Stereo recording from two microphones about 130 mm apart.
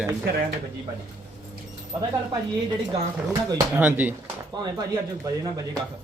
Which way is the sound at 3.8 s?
10° right (ahead or behind).